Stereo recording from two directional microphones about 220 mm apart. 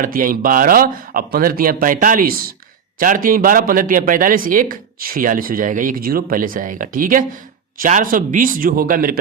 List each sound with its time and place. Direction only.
0.0 s speech: 40° right (ahead or behind)